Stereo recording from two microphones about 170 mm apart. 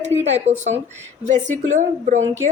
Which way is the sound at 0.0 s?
40° right (ahead or behind).